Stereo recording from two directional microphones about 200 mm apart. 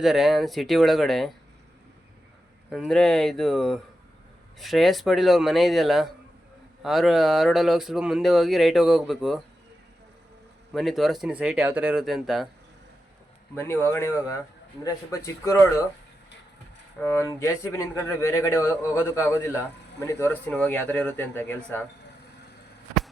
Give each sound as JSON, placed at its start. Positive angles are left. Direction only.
{"t": 0.0, "sound": "speech", "side_deg": 0}
{"t": 2.6, "sound": "speech", "side_deg": 0}
{"t": 10.8, "sound": "speech", "side_deg": 0}
{"t": 13.6, "sound": "speech", "side_deg": 10}
{"t": 17.0, "sound": "speech", "side_deg": 15}